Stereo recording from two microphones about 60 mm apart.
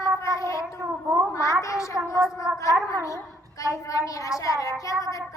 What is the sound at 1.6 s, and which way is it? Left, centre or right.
A woman's voice, left.